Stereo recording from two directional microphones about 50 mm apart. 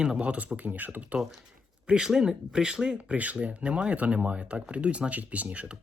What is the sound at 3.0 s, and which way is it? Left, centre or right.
Speech, right.